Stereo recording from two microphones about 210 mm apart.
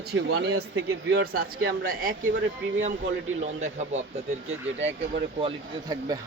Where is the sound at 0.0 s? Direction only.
50° right (ahead or behind).